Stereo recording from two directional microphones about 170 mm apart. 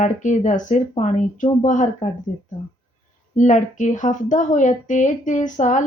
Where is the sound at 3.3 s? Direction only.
45° left (ahead or behind).